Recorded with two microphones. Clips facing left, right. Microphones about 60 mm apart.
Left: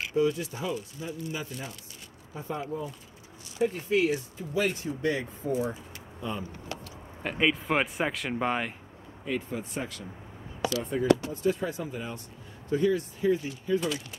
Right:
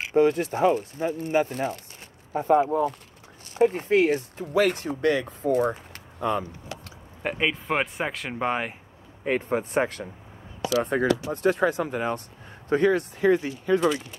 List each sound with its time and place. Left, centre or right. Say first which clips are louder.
0.1 s speech: right 7 dB; right
3.5 s speech: right 6 dB; right
4.6 s speech: right 6 dB; right
7.3 s speech: even; centre
9.2 s speech: right 7 dB; right
10.7 s speech: right 3 dB; right